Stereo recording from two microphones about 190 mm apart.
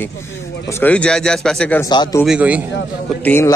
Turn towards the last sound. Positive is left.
turn(degrees=10)  # may be behind; listen again after turning